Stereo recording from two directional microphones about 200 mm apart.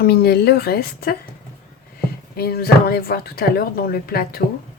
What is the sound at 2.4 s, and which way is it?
Speech, 50° left (ahead or behind).